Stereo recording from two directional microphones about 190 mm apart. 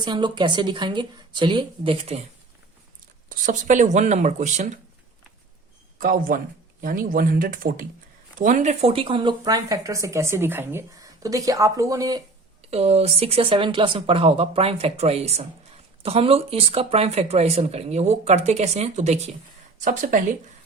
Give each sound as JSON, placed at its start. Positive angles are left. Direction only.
{"t": 0.0, "sound": "a woman's voice", "side_deg": -25}
{"t": 3.2, "sound": "speech", "side_deg": -45}
{"t": 6.0, "sound": "speech", "side_deg": -45}
{"t": 12.6, "sound": "speech", "side_deg": -35}